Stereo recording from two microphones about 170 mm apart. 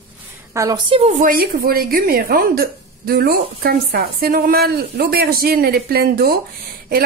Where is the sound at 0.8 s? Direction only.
30° right (ahead or behind).